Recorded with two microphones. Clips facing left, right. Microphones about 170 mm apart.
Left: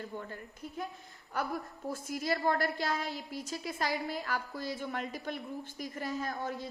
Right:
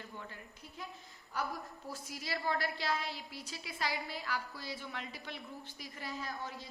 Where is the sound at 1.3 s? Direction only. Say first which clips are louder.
Left 4 dB; 55° left (ahead or behind).